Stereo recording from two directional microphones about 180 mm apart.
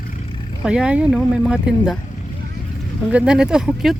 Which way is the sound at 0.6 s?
5° right (ahead or behind).